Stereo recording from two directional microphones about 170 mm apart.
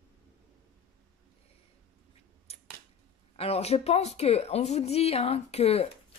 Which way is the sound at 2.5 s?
35° left (ahead or behind).